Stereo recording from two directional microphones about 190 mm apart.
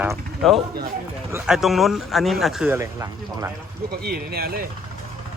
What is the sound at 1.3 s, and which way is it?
Speech, 5° right (ahead or behind).